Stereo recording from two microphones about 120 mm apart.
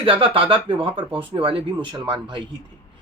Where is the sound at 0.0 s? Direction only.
50° right (ahead or behind).